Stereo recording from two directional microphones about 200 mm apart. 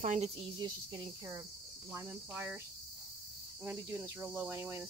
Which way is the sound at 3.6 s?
5° right (ahead or behind).